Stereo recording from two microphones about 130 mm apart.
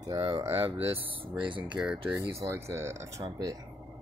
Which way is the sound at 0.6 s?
50° right (ahead or behind).